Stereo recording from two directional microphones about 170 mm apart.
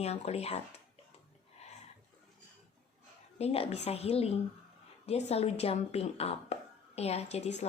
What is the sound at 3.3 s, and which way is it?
Speech, 35° left (ahead or behind).